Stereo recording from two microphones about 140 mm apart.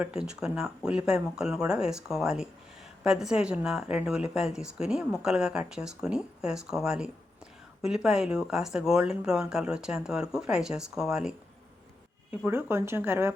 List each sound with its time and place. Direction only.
0.0 s speech: 5° right (ahead or behind)
12.5 s speech: 15° right (ahead or behind)